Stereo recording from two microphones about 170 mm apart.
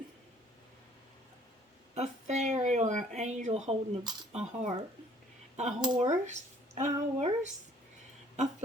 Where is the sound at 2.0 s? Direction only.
40° right (ahead or behind).